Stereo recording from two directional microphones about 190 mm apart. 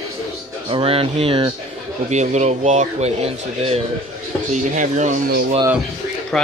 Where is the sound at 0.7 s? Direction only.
30° right (ahead or behind).